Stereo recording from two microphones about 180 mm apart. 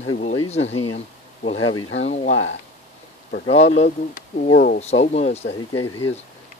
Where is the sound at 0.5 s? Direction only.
35° left (ahead or behind).